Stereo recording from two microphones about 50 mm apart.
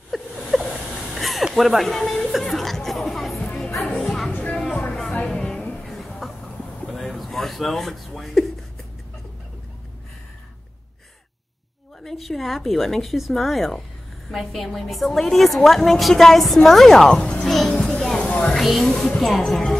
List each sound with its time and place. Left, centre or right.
0.1 s a sound: centre
1.5 s a woman's voice: centre
2.4 s a sound: centre
4.0 s music: centre
4.4 s music: left
5.4 s a sound: centre
5.9 s a sound: centre
12.0 s a woman's voice: centre
17.2 s music: centre
17.5 s speech: centre
17.8 s music: centre
18.5 s speech: centre